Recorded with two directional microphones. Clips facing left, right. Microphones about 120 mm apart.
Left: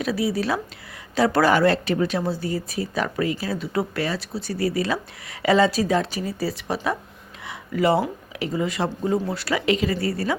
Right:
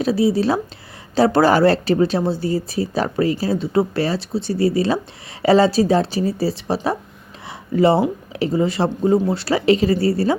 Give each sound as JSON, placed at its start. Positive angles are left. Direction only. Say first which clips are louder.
{"t": 0.0, "sound": "speech", "louder": "right 7 dB", "side_deg": -30}